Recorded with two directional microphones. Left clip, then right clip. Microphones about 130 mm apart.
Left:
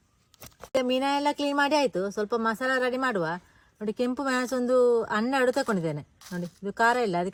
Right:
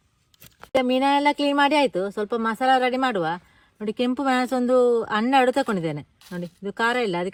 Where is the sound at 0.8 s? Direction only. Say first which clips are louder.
Right 6 dB; 60° right (ahead or behind).